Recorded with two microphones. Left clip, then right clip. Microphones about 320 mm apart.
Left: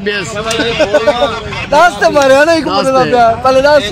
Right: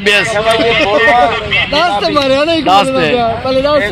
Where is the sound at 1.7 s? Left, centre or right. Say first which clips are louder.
Left 7 dB; left.